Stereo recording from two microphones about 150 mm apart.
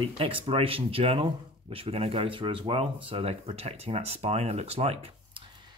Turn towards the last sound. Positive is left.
turn(degrees=-40)  # may be behind; listen again after turning